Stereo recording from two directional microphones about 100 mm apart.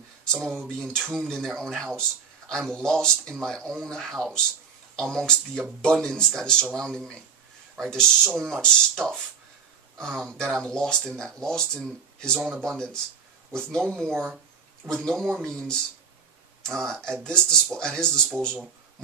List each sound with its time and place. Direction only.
0.4 s speech: 5° left (ahead or behind)